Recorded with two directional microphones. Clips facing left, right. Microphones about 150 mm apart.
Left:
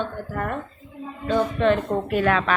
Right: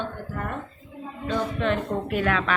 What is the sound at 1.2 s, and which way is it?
A woman's voice, 35° left (ahead or behind).